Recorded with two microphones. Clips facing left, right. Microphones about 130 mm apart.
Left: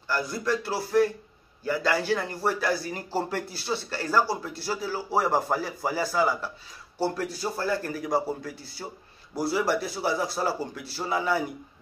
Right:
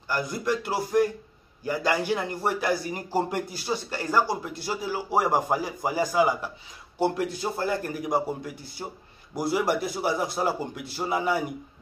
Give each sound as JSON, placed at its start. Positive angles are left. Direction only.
{"t": 0.1, "sound": "a man's voice", "side_deg": -20}